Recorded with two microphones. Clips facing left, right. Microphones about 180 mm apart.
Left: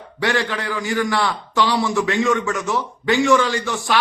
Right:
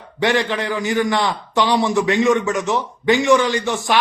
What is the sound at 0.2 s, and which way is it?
A man's voice, 20° right (ahead or behind).